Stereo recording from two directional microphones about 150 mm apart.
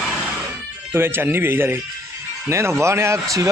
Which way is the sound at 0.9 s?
15° right (ahead or behind).